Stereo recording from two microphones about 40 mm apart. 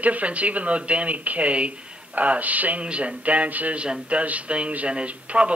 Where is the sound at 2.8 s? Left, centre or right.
Right.